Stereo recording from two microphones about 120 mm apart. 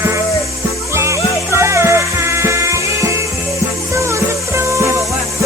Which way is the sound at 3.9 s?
25° right (ahead or behind).